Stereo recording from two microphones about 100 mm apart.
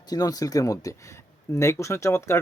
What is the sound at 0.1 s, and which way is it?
Speech, 40° left (ahead or behind).